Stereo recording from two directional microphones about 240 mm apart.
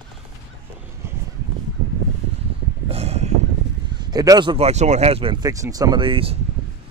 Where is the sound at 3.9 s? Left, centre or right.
Centre.